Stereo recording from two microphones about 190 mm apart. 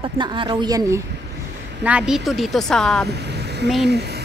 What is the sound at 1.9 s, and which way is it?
Speech, 5° right (ahead or behind).